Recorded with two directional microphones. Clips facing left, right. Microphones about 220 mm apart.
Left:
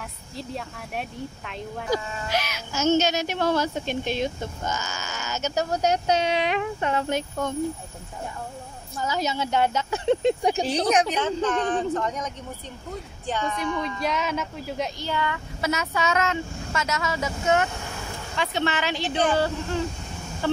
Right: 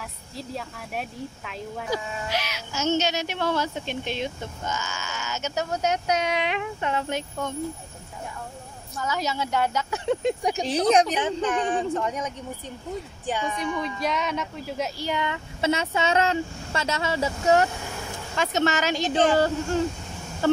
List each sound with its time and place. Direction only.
0.4 s speech: centre (ahead or behind)
1.9 s speech: 45° left (ahead or behind)
8.9 s speech: 30° left (ahead or behind)
10.9 s speech: 35° right (ahead or behind)
11.4 s speech: 10° right (ahead or behind)
13.3 s speech: 10° right (ahead or behind)
13.7 s speech: centre (ahead or behind)
15.0 s speech: 15° right (ahead or behind); by 17.6 s 35° right (ahead or behind)
18.4 s speech: 45° right (ahead or behind)